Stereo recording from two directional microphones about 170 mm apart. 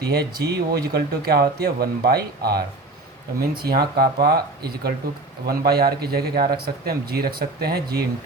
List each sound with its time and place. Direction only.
0.0 s a man's voice: 65° right (ahead or behind)